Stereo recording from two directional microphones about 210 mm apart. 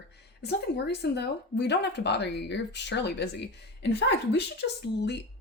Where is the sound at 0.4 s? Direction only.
50° left (ahead or behind).